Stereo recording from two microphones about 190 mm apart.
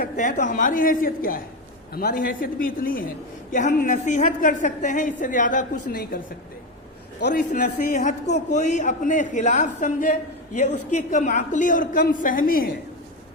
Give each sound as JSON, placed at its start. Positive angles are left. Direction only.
{"t": 0.0, "sound": "a woman's voice", "side_deg": 45}
{"t": 7.2, "sound": "a man's voice", "side_deg": 65}
{"t": 7.5, "sound": "a man's voice", "side_deg": 40}